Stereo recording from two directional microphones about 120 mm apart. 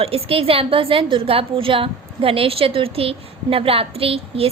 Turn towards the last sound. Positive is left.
turn(degrees=-50)  # may be behind; listen again after turning